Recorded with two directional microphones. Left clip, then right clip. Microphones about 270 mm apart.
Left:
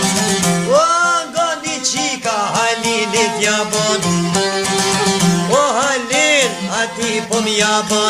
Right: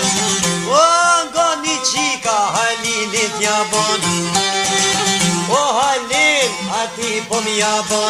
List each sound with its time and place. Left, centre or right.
0.7 s music: centre
6.1 s music: centre
7.5 s music: centre